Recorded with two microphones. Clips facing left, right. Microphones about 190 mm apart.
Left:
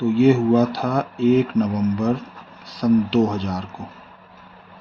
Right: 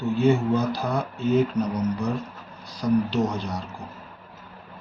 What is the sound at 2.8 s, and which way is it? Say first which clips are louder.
Speech: left 6 dB; 80° left.